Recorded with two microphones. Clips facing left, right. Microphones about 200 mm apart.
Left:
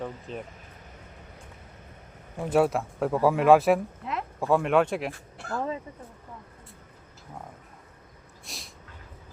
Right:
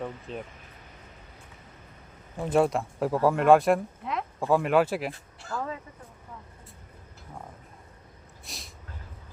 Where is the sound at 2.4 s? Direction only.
5° left (ahead or behind).